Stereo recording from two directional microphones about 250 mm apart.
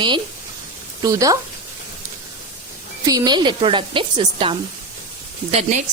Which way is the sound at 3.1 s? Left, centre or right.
Centre.